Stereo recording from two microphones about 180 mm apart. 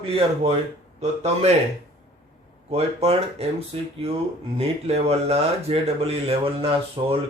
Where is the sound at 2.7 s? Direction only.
35° right (ahead or behind).